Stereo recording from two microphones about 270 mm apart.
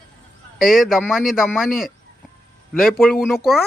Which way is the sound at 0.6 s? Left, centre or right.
Centre.